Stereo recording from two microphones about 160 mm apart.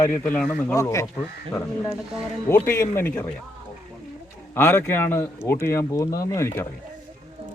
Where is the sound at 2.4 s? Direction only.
15° left (ahead or behind).